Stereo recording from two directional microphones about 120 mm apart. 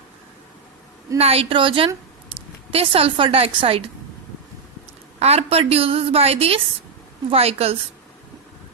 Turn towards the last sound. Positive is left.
turn(degrees=-55)  # may be behind; listen again after turning